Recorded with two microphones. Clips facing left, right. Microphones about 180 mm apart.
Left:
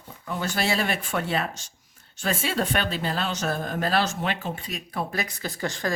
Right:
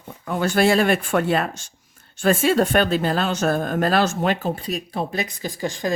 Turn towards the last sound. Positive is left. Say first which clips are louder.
# right 4 dB
turn(degrees=-15)  # may be behind; listen again after turning